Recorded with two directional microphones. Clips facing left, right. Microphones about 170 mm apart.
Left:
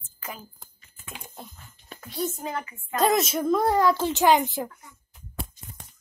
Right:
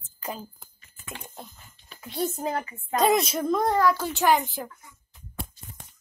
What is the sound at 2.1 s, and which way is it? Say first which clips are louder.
Speech: right 2 dB; 40° right (ahead or behind).